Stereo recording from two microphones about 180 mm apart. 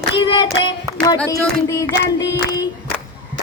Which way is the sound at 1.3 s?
20° left (ahead or behind).